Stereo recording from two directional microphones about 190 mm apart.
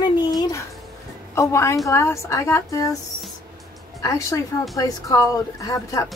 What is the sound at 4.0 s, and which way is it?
A woman's voice, 15° left (ahead or behind).